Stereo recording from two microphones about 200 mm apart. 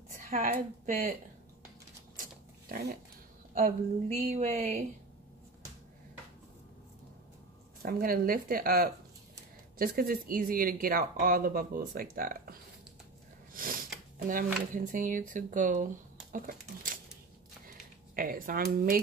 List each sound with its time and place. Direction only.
0.2 s a woman's voice: 40° right (ahead or behind)
3.5 s speech: 35° right (ahead or behind)
7.8 s speech: 45° right (ahead or behind)
13.5 s a sound: 45° right (ahead or behind)
14.2 s speech: 40° right (ahead or behind)
18.1 s speech: 45° right (ahead or behind)